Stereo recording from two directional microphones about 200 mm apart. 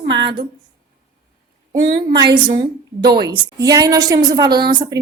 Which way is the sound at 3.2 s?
20° right (ahead or behind).